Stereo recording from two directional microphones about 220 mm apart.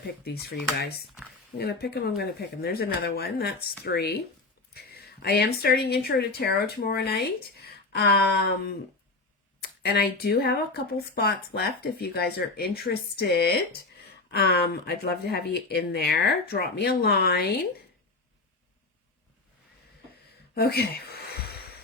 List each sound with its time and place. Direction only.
1.5 s speech: 45° left (ahead or behind)
9.8 s speech: 45° left (ahead or behind)
20.6 s speech: 45° left (ahead or behind)